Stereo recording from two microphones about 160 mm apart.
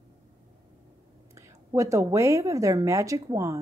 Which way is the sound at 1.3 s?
20° right (ahead or behind).